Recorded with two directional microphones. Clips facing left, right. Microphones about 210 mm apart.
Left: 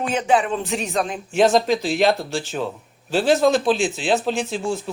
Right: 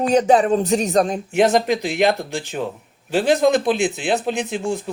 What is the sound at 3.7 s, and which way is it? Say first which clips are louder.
Speech: right 2 dB; 60° right (ahead or behind).